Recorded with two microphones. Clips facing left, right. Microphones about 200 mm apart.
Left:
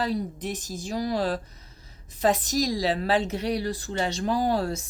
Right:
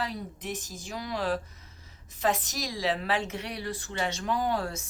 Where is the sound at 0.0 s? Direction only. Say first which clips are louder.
Left 7 dB; 35° left (ahead or behind).